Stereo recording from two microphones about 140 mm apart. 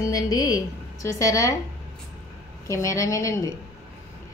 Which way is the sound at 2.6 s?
20° left (ahead or behind).